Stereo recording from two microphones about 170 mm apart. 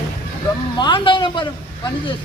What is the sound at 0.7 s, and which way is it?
Speech, 25° left (ahead or behind).